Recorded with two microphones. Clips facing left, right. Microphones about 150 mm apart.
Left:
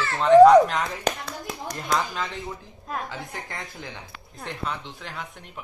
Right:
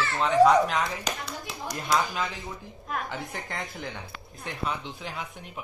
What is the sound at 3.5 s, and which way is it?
Speech, 20° right (ahead or behind).